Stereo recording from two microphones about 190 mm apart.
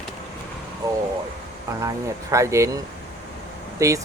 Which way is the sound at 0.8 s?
15° right (ahead or behind).